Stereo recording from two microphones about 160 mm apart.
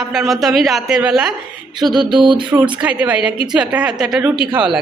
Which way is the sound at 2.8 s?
10° right (ahead or behind).